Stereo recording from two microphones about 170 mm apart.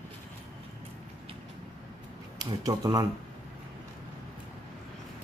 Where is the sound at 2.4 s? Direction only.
25° right (ahead or behind).